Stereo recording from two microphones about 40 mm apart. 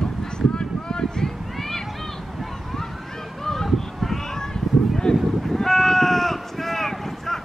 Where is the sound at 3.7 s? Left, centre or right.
Centre.